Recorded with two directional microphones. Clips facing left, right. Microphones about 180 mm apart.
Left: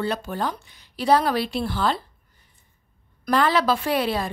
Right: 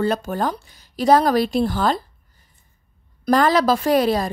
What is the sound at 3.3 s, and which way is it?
Speech, 40° right (ahead or behind).